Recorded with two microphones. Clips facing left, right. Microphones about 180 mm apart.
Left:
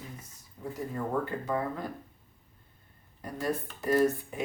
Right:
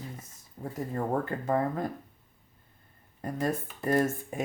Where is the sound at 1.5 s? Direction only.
45° right (ahead or behind).